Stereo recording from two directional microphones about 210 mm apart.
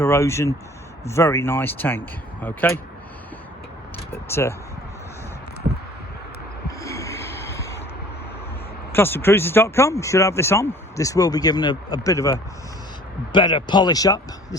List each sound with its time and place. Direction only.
0.0 s speech: 10° left (ahead or behind)
4.1 s speech: 10° left (ahead or behind)
6.7 s snort: 15° left (ahead or behind)
8.9 s speech: 10° left (ahead or behind)